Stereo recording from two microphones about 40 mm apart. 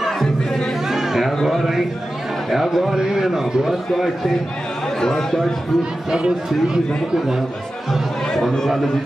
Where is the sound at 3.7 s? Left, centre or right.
Centre.